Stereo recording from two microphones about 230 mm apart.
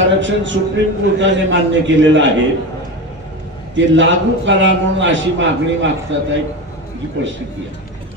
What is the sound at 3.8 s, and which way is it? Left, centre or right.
A man's voice, right.